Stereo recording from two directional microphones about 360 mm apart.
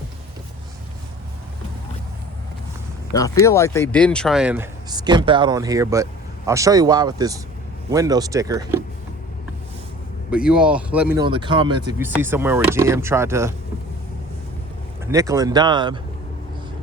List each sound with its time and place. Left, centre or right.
3.2 s speech: centre
10.3 s speech: centre
15.0 s speech: centre